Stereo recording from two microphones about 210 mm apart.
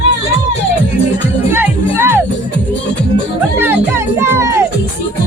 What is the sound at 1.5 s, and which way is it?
Music, 10° right (ahead or behind).